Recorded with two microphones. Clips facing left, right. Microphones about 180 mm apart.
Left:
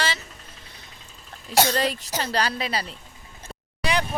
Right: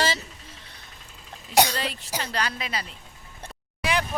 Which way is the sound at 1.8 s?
40° left (ahead or behind).